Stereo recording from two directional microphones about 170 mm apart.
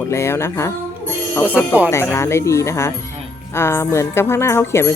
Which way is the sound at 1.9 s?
15° left (ahead or behind).